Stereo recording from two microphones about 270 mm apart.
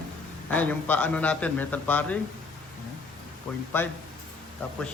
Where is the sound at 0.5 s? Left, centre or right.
Centre.